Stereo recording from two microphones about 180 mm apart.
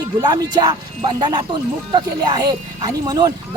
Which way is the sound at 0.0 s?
20° right (ahead or behind).